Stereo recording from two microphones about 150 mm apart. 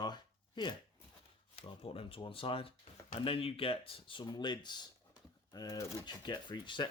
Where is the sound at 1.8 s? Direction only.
40° left (ahead or behind).